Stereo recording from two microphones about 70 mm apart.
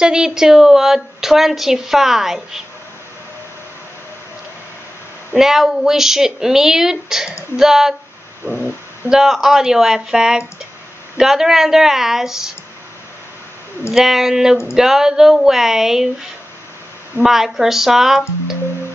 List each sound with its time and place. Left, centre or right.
0.0 s a woman's voice: centre
5.3 s a woman's voice: centre
8.5 s speech: right
9.1 s a woman's voice: centre
13.9 s a woman's voice: centre
17.2 s a woman's voice: centre